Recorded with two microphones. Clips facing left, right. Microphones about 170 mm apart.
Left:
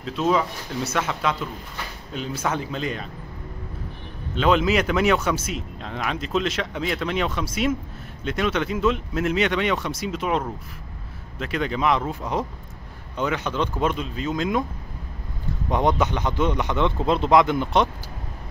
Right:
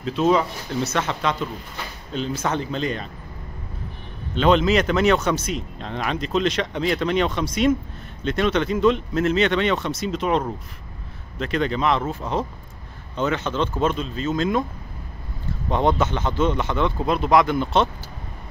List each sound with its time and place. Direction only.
0.0 s speech: centre (ahead or behind)
4.4 s speech: 5° left (ahead or behind)
15.7 s speech: 15° left (ahead or behind)